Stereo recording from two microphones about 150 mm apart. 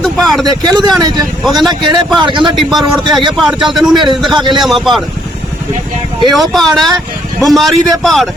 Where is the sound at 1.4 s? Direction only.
Centre (ahead or behind).